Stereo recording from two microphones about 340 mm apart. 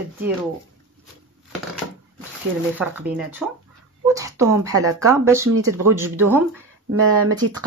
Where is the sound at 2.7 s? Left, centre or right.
Centre.